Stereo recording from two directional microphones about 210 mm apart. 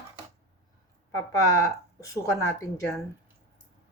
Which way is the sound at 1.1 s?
15° left (ahead or behind).